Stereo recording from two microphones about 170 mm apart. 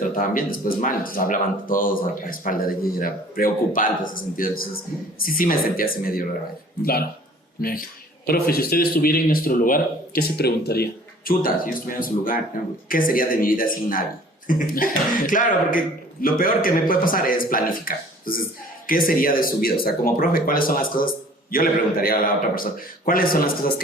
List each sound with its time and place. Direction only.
0.2 s speech: 55° left (ahead or behind)
7.6 s speech: 60° left (ahead or behind)
11.3 s speech: 55° left (ahead or behind)